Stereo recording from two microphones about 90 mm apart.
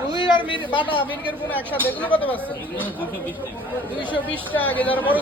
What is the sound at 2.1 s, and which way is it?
Speech, 20° left (ahead or behind).